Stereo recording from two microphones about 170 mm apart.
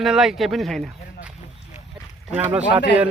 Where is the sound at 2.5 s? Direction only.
5° right (ahead or behind).